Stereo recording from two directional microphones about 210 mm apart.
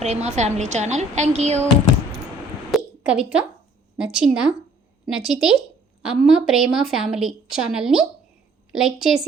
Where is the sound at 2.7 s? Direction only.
5° right (ahead or behind).